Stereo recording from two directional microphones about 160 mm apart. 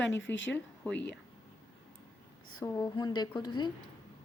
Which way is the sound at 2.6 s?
20° left (ahead or behind).